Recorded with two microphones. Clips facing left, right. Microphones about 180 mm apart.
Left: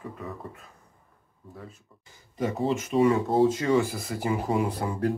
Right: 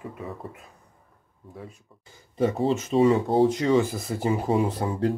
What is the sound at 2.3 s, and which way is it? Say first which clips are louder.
Speech: right 4 dB; 30° right (ahead or behind).